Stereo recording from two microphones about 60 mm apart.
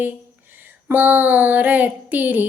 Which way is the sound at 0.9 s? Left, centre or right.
Right.